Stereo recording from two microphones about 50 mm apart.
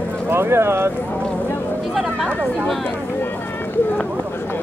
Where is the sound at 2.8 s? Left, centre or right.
Left.